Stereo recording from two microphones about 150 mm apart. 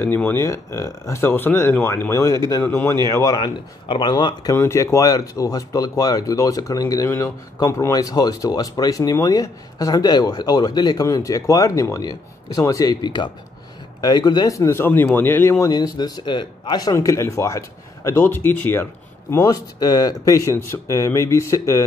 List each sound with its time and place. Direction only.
0.0 s speech: 15° left (ahead or behind)
19.3 s speech: 25° left (ahead or behind)